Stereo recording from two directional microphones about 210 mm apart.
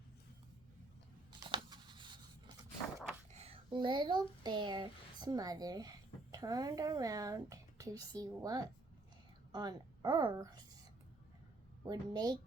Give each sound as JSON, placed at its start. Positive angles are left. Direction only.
{"t": 1.5, "sound": "a sound", "side_deg": -20}
{"t": 3.3, "sound": "a woman's voice", "side_deg": -30}
{"t": 11.9, "sound": "speech", "side_deg": -20}